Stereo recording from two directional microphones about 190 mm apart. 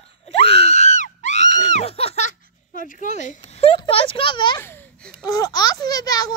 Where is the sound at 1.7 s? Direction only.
30° left (ahead or behind).